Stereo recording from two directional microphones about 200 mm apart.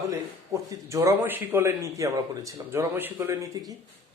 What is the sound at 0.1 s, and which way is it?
A man's voice, 15° right (ahead or behind).